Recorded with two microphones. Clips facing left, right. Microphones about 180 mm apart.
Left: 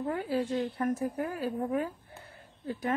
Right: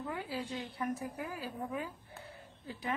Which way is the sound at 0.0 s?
50° left (ahead or behind).